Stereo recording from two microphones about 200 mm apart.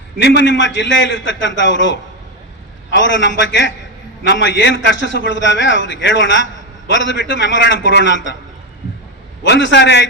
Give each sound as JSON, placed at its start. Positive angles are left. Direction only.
{"t": 0.2, "sound": "a man's voice", "side_deg": 60}
{"t": 9.4, "sound": "a man's voice", "side_deg": 60}